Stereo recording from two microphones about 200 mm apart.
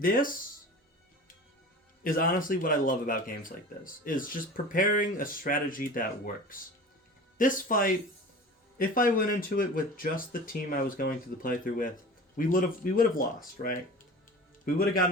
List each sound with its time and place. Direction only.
0.0 s speech: 45° left (ahead or behind)
2.0 s a man's voice: 45° left (ahead or behind)